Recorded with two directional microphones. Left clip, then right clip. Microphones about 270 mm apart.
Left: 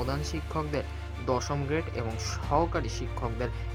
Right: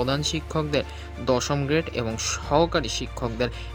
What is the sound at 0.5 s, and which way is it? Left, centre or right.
Speech, right.